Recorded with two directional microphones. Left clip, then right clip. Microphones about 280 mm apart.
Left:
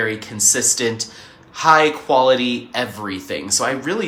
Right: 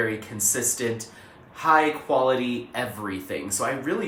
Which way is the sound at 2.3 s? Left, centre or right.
Centre.